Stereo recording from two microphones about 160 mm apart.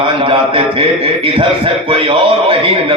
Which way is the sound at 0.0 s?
35° right (ahead or behind).